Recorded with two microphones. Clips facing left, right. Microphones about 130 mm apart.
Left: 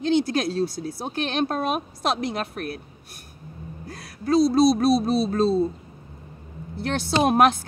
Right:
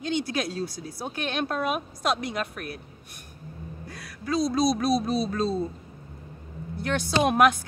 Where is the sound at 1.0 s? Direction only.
30° left (ahead or behind).